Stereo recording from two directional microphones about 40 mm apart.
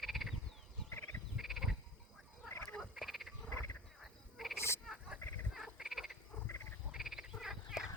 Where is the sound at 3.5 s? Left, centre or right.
Left.